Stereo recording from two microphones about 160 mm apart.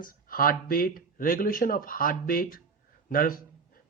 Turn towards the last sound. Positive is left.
turn(degrees=60)  # may be behind; listen again after turning